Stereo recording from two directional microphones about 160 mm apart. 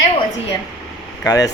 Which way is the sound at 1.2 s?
20° left (ahead or behind).